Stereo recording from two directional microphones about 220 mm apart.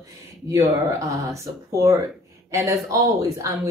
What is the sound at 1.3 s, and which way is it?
Speech, 15° right (ahead or behind).